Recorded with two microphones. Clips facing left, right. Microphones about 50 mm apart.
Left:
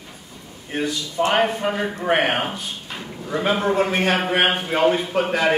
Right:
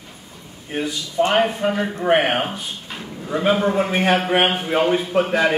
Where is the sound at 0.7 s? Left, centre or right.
Centre.